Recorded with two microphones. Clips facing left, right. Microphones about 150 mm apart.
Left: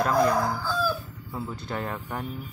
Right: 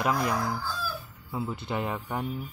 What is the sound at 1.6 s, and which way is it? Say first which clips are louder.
Speech: right 1 dB; 15° right (ahead or behind).